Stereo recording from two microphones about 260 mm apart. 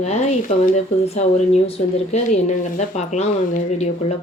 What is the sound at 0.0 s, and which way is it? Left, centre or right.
Speech, left.